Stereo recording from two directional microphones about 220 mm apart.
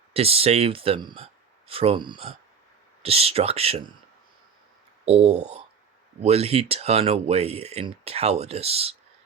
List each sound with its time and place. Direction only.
0.1 s speech: 25° right (ahead or behind)
5.0 s speech: 30° right (ahead or behind)